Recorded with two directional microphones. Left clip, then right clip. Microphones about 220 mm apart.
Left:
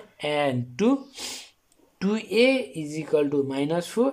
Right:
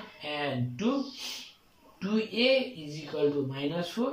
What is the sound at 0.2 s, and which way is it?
Speech, 40° left (ahead or behind).